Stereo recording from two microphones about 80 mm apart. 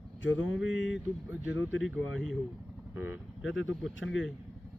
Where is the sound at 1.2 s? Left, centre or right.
Right.